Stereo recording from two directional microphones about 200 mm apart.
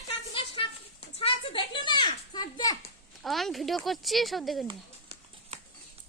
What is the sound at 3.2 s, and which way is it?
Speech, centre (ahead or behind).